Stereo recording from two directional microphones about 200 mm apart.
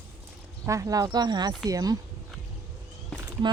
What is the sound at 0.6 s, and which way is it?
Speech, 15° right (ahead or behind).